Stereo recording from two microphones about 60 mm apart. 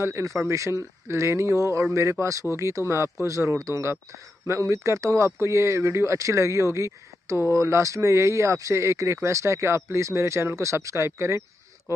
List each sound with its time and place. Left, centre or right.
0.0 s speech: right